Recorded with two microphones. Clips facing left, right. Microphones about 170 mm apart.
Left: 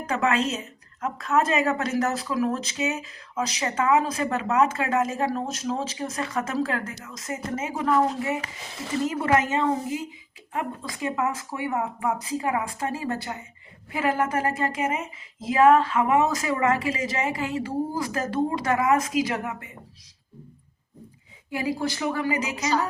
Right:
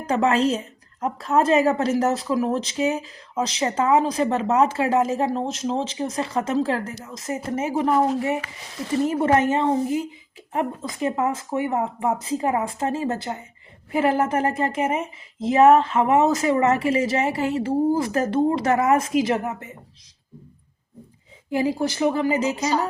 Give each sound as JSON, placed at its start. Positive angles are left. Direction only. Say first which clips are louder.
{"t": 0.1, "sound": "a woman's voice", "louder": "right 5 dB", "side_deg": -30}
{"t": 21.6, "sound": "speech", "louder": "right 5 dB", "side_deg": -25}